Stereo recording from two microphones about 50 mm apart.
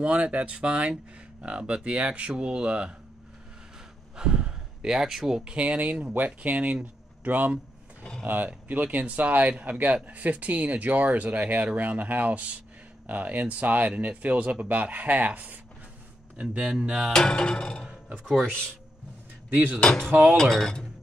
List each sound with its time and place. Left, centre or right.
0.0 s speech: right
4.2 s speech: centre
17.1 s music: centre
18.1 s speech: centre
18.4 s music: centre
19.5 s speech: right
19.8 s music: centre
20.3 s music: centre